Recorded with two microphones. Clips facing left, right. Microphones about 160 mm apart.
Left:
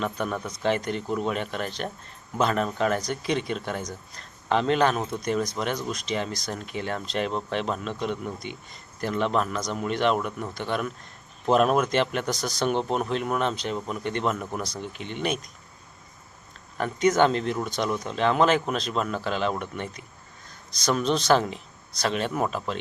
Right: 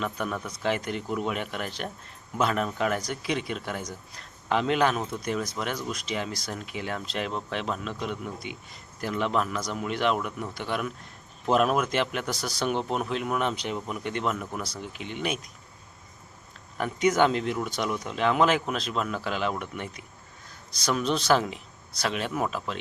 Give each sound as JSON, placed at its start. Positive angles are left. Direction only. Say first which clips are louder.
{"t": 0.0, "sound": "speech", "louder": "left 2 dB", "side_deg": -5}
{"t": 16.7, "sound": "speech", "louder": "left 2 dB", "side_deg": -10}